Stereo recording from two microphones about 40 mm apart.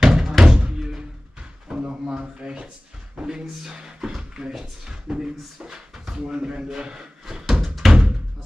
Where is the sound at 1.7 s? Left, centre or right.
Right.